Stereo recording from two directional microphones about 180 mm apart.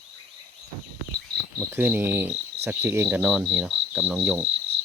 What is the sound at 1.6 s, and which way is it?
Cricket, 10° right (ahead or behind).